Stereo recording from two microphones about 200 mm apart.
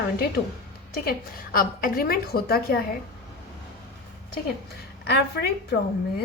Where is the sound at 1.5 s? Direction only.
45° left (ahead or behind).